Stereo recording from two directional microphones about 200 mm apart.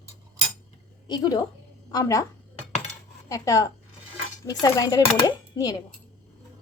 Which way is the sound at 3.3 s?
15° left (ahead or behind).